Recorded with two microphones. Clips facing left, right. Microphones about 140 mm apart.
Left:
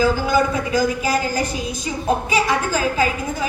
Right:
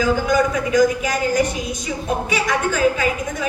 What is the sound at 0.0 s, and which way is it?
A woman's voice, 30° left (ahead or behind).